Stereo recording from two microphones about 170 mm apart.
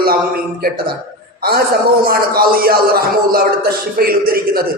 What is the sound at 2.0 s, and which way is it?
A man's voice, 60° right (ahead or behind).